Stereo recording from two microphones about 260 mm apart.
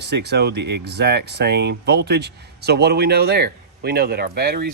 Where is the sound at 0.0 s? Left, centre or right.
Right.